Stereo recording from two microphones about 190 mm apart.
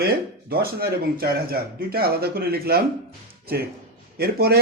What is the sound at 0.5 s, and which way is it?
Speech, 55° right (ahead or behind).